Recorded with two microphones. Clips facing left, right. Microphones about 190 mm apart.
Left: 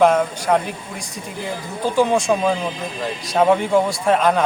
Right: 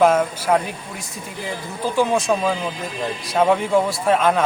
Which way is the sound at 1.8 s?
Centre (ahead or behind).